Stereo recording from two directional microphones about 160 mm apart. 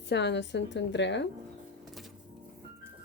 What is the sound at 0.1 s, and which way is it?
A woman's voice, 90° left.